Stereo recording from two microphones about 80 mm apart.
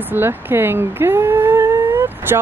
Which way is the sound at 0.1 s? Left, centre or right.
Right.